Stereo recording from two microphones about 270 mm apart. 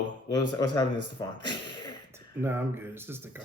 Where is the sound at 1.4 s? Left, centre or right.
Centre.